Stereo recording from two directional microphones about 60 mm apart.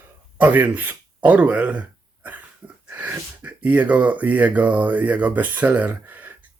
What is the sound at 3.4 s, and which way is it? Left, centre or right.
Speech, right.